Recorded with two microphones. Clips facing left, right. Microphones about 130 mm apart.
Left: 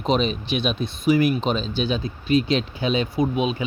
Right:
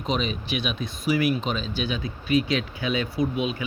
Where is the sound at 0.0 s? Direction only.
30° left (ahead or behind).